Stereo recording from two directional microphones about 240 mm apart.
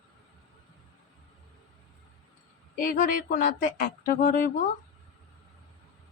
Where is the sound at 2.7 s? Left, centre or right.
Left.